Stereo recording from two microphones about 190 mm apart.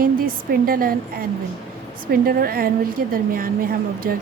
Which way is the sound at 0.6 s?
50° right (ahead or behind).